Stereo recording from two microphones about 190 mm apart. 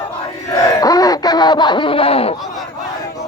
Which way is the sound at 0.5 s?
20° left (ahead or behind).